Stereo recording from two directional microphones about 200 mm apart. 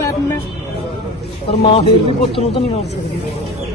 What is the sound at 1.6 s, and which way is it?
Speech, 25° left (ahead or behind).